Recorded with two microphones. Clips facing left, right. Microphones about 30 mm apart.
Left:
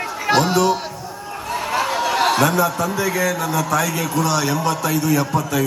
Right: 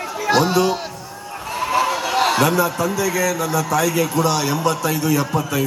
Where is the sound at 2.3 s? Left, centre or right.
Right.